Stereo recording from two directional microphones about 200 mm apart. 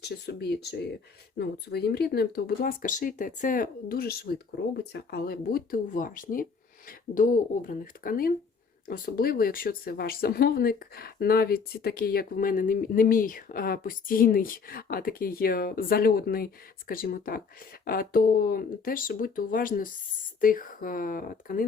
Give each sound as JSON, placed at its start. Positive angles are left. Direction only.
{"t": 0.0, "sound": "speech", "side_deg": 55}